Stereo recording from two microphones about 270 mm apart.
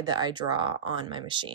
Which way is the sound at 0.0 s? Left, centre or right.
Centre.